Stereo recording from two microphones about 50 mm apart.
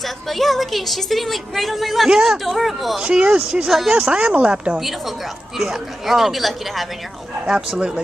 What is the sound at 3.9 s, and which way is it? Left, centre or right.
Speech, centre.